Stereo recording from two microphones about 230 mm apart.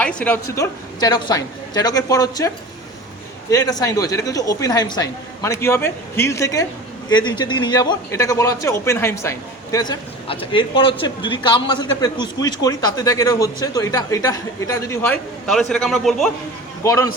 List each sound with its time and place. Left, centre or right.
0.0 s a sound: centre
0.5 s a man's voice: centre
3.5 s a man's voice: centre
16.8 s a man's voice: centre